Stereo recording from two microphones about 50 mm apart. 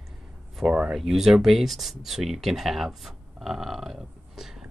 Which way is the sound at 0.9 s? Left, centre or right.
Centre.